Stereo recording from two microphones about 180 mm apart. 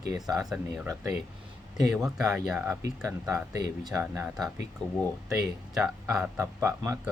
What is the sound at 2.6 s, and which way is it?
Speech, 15° right (ahead or behind).